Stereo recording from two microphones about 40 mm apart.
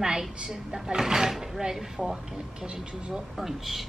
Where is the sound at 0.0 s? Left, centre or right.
Centre.